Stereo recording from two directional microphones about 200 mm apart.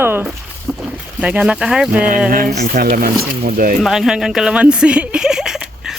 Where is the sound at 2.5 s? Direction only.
40° right (ahead or behind).